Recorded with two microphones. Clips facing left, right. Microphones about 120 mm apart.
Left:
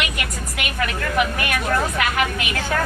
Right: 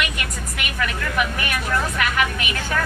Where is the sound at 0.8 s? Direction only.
40° left (ahead or behind).